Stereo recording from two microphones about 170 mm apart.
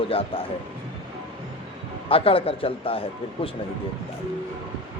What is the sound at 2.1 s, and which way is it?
A man's voice, 35° left (ahead or behind).